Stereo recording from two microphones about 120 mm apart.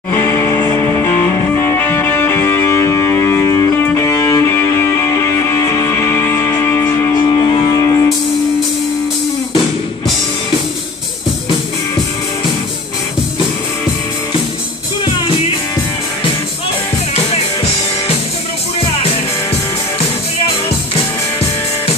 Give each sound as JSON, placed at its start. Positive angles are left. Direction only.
{"t": 0.1, "sound": "music", "side_deg": 20}